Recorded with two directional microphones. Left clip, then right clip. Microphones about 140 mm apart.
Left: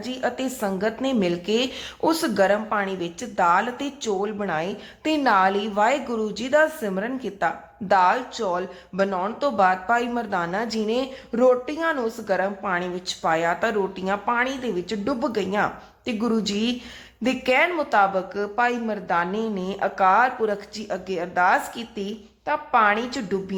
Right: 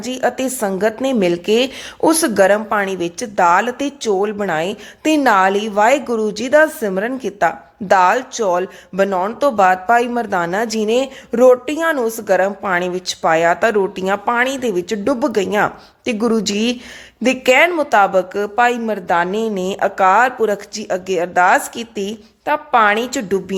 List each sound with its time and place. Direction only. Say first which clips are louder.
0.0 s a woman's voice: right 8 dB; 55° right (ahead or behind)